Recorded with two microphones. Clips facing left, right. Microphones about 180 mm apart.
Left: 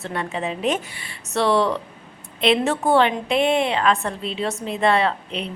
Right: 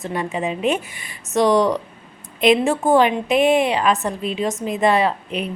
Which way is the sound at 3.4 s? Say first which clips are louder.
Right 3 dB; 25° left (ahead or behind).